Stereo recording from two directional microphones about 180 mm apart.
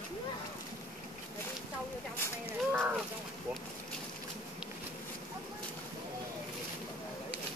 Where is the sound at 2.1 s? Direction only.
10° left (ahead or behind).